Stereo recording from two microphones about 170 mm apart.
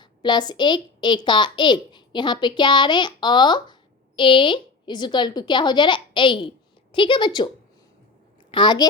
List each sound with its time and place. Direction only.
0.0 s a child's voice: 25° left (ahead or behind)